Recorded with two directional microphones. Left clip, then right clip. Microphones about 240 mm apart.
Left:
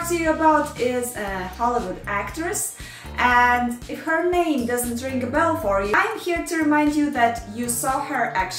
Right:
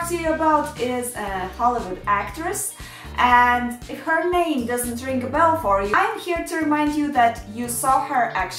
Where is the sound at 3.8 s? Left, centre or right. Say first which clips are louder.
Right 3 dB; centre.